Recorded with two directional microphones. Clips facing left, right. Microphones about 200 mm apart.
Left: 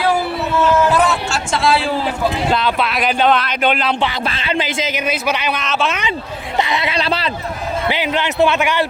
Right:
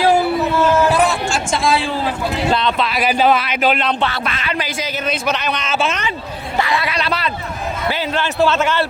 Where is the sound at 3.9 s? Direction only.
15° left (ahead or behind).